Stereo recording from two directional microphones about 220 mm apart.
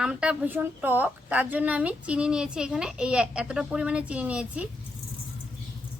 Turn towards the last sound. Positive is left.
turn(degrees=-5)  # may be behind; listen again after turning